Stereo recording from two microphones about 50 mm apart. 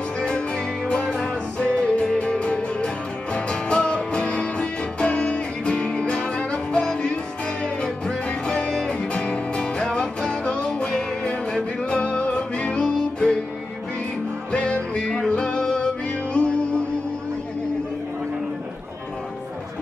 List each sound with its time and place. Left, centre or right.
0.2 s music: centre
14.5 s music: left